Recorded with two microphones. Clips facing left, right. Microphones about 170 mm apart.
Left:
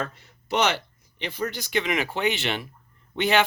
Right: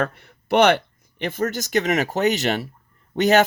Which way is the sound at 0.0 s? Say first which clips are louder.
Right 7 dB; 60° right (ahead or behind).